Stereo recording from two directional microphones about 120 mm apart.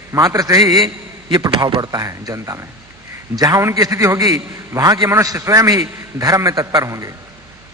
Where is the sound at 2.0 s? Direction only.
25° right (ahead or behind).